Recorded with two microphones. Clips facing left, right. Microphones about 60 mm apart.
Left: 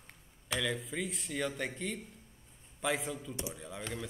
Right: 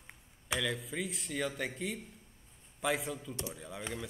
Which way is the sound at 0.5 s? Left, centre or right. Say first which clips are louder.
Even; centre.